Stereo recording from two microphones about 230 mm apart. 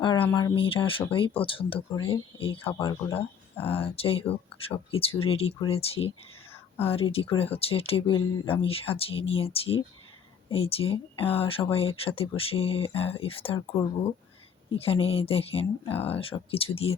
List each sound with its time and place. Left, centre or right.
0.0 s speech: centre
6.5 s whispering: centre
6.9 s speech: left
14.7 s speech: left